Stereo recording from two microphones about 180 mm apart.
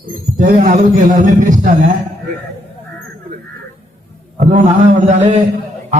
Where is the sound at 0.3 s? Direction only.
45° right (ahead or behind).